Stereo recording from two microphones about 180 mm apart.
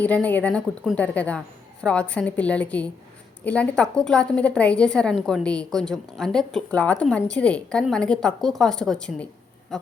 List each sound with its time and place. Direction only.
0.0 s a woman's voice: 10° left (ahead or behind)